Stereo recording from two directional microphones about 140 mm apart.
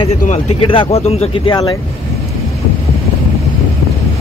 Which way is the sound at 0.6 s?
40° left (ahead or behind).